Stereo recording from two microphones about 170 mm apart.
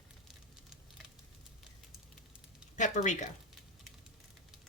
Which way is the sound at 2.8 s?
45° left (ahead or behind).